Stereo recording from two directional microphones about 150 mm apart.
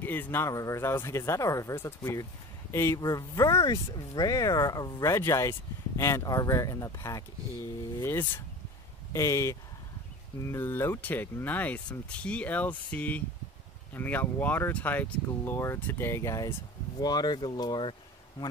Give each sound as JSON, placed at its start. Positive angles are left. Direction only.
{"t": 0.0, "sound": "speech", "side_deg": 15}